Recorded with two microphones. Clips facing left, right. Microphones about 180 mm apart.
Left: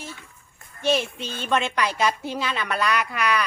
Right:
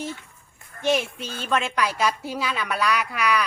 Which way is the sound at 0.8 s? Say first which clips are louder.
Even; 15° right (ahead or behind).